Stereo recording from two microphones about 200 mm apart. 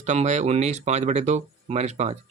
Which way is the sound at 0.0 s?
35° right (ahead or behind).